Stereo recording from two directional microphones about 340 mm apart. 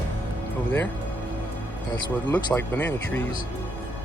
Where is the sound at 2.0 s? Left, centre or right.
Centre.